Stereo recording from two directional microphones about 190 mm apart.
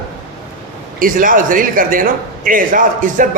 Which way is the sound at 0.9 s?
45° right (ahead or behind).